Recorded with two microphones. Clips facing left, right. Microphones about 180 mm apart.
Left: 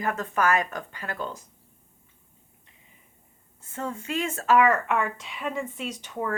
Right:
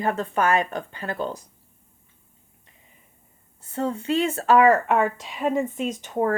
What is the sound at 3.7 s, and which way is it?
Speech, 35° right (ahead or behind).